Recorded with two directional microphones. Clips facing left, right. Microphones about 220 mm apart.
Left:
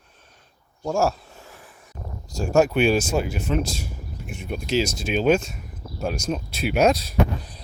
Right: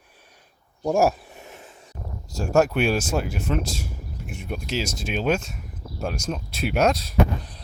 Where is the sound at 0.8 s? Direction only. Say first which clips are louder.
Right 2 dB; 15° right (ahead or behind).